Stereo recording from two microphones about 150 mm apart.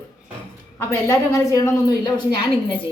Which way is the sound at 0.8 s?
20° left (ahead or behind).